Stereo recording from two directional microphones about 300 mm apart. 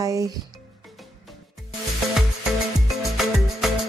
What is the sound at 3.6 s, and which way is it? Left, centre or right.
Music, centre.